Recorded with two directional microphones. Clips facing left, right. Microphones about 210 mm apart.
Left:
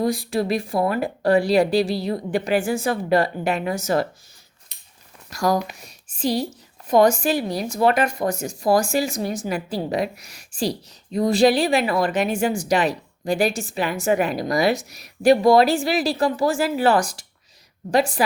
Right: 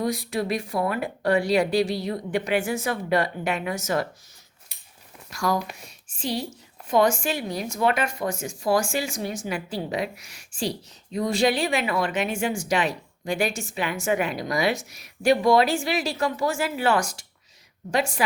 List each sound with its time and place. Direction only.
0.0 s a woman's voice: 30° left (ahead or behind)
4.7 s a sound: 10° right (ahead or behind)
5.3 s a woman's voice: 40° left (ahead or behind)